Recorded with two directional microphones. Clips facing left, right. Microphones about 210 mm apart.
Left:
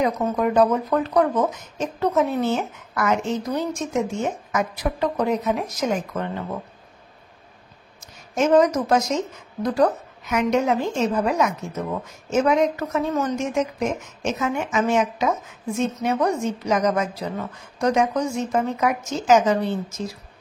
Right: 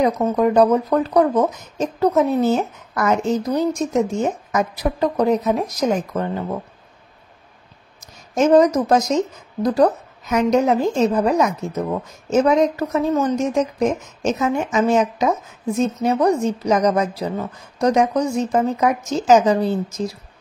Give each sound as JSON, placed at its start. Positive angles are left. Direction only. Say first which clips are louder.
{"t": 0.0, "sound": "speech", "louder": "right 4 dB", "side_deg": -35}
{"t": 8.4, "sound": "speech", "louder": "right 4 dB", "side_deg": -35}